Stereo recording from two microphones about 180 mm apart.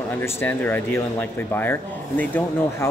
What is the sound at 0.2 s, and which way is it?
Speech, 10° left (ahead or behind).